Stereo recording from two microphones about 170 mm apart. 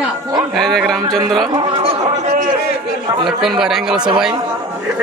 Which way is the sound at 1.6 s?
30° right (ahead or behind).